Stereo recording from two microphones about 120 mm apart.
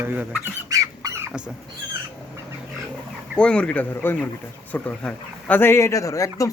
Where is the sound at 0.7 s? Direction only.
25° right (ahead or behind).